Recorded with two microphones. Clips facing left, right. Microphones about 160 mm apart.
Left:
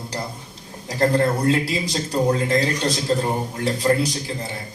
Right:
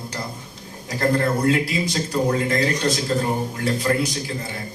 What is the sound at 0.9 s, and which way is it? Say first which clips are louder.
Speech: left 2 dB; 35° left (ahead or behind).